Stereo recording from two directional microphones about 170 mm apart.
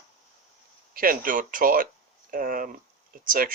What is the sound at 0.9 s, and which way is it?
Speech, 55° right (ahead or behind).